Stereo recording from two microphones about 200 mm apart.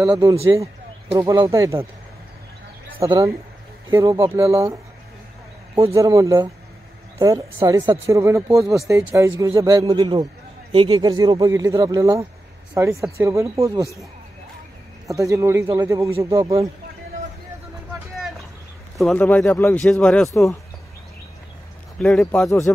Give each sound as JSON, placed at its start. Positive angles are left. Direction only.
{"t": 0.0, "sound": "speech", "side_deg": -10}
{"t": 3.0, "sound": "speech", "side_deg": -15}
{"t": 5.9, "sound": "speech", "side_deg": -15}
{"t": 15.0, "sound": "speech", "side_deg": -15}
{"t": 18.9, "sound": "speech", "side_deg": 0}
{"t": 21.9, "sound": "speech", "side_deg": 0}